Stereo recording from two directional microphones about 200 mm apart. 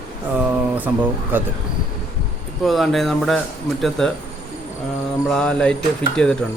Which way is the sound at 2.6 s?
Centre (ahead or behind).